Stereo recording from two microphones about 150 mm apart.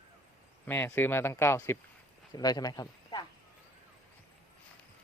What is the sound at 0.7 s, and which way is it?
Speech, 15° left (ahead or behind).